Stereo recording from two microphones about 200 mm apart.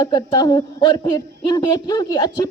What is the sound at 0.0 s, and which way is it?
A woman's voice, 20° left (ahead or behind).